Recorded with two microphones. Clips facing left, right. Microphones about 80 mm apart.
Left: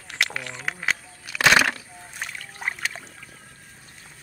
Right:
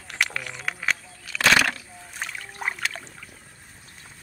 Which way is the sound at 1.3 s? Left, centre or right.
Centre.